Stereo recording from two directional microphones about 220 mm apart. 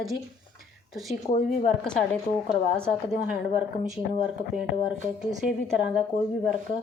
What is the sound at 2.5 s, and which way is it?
Speech, 5° left (ahead or behind).